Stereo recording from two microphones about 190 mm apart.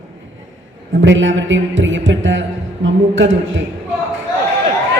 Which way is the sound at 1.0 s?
75° right (ahead or behind).